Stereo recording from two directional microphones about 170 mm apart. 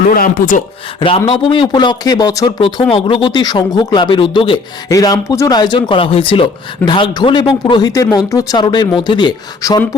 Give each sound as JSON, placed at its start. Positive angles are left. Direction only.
{"t": 0.1, "sound": "speech", "side_deg": 60}
{"t": 0.9, "sound": "speech", "side_deg": 30}